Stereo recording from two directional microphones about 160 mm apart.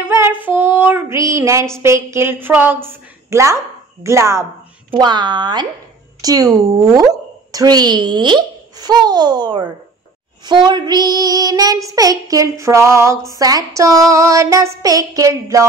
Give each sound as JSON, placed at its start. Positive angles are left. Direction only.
{"t": 0.0, "sound": "female singing", "side_deg": -15}
{"t": 3.3, "sound": "speech", "side_deg": -20}
{"t": 4.0, "sound": "female singing", "side_deg": -20}
{"t": 4.9, "sound": "child singing", "side_deg": -30}